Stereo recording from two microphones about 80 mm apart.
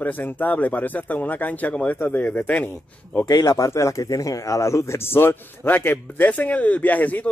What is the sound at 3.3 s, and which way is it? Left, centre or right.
Speech, left.